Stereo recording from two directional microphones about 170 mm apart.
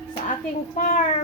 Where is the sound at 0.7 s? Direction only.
50° left (ahead or behind).